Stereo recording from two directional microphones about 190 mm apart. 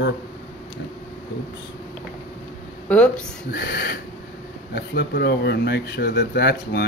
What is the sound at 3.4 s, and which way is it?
Speech, 55° left (ahead or behind).